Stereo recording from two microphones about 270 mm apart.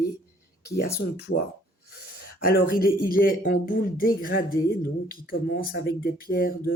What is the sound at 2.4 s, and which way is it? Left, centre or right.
Speech, left.